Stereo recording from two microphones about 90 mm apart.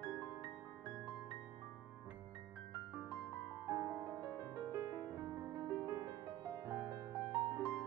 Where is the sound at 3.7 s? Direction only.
25° right (ahead or behind).